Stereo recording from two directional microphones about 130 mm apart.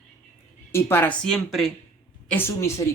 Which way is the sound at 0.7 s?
20° left (ahead or behind).